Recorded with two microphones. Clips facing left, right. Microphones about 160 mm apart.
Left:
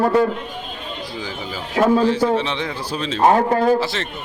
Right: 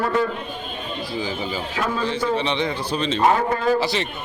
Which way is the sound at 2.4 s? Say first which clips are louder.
Right 1 dB; 5° left (ahead or behind).